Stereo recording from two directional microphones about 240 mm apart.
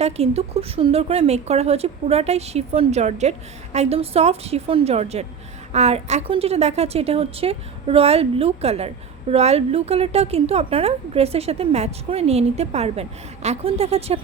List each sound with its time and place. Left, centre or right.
0.0 s a woman's voice: right